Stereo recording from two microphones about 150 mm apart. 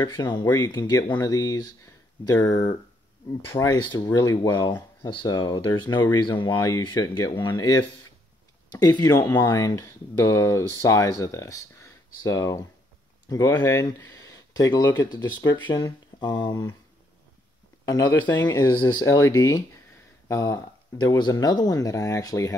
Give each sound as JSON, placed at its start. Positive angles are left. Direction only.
{"t": 0.0, "sound": "speech", "side_deg": 30}
{"t": 17.8, "sound": "speech", "side_deg": 25}